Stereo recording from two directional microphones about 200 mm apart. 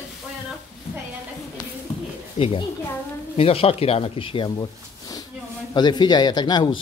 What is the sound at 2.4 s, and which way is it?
Speech, 25° left (ahead or behind).